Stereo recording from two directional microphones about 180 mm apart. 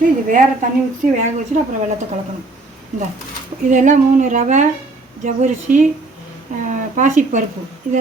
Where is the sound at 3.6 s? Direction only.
45° right (ahead or behind).